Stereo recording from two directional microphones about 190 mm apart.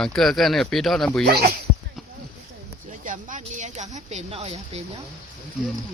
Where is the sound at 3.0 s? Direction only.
45° right (ahead or behind).